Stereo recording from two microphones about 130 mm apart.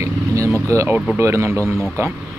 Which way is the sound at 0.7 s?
25° right (ahead or behind).